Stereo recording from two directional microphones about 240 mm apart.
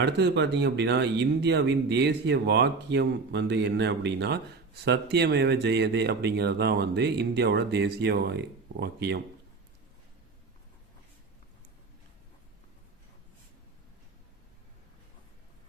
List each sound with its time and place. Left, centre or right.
0.0 s speech: right